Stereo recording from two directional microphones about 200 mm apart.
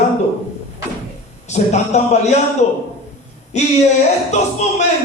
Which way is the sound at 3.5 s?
35° left (ahead or behind).